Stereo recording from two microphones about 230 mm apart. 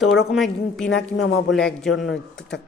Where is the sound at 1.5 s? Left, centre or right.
Centre.